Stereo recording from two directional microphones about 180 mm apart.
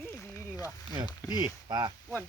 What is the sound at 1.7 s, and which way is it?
Speech, 25° right (ahead or behind).